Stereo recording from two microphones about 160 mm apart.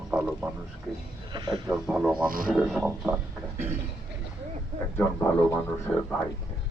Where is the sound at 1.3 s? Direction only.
30° right (ahead or behind).